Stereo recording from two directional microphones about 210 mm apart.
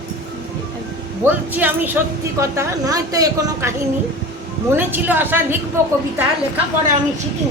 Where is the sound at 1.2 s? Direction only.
10° right (ahead or behind).